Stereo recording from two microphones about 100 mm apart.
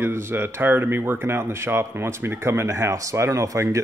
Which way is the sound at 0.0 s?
25° right (ahead or behind).